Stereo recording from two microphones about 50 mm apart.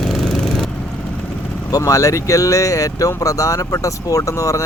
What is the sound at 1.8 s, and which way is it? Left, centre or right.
Speech, left.